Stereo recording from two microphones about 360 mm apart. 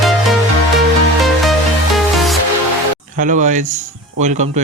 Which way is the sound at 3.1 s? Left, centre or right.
Right.